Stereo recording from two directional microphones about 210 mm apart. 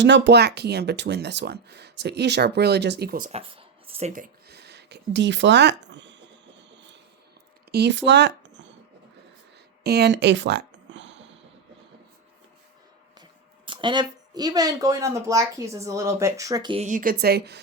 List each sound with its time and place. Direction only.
0.0 s speech: 55° right (ahead or behind)
9.8 s a sound: 50° right (ahead or behind)
13.7 s speech: 20° right (ahead or behind)
16.8 s a woman's voice: 40° right (ahead or behind)